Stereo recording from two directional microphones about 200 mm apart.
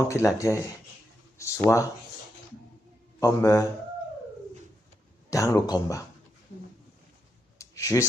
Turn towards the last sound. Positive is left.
turn(degrees=15)  # may be behind; listen again after turning